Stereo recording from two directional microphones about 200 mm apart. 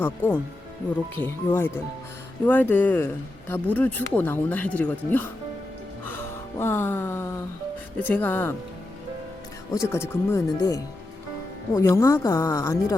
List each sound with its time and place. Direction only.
0.0 s speech: 10° left (ahead or behind)
6.1 s music: 10° left (ahead or behind)
7.9 s speech: 10° left (ahead or behind)
9.9 s speech: 10° left (ahead or behind)